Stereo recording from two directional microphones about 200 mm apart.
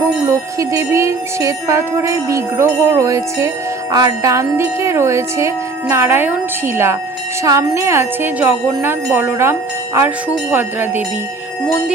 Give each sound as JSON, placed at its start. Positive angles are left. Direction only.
{"t": 0.3, "sound": "speech", "side_deg": -15}
{"t": 7.4, "sound": "speech", "side_deg": -15}